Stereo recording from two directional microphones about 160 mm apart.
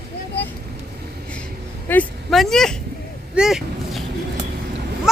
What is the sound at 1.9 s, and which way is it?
Speech, 15° left (ahead or behind).